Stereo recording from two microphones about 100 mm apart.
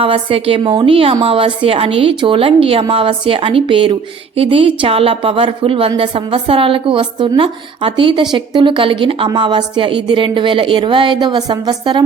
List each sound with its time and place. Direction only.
0.0 s a woman's voice: 65° right (ahead or behind)
2.8 s a woman's voice: 60° right (ahead or behind)